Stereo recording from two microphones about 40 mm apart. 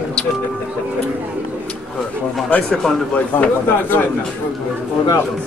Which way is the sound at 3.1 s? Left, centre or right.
Left.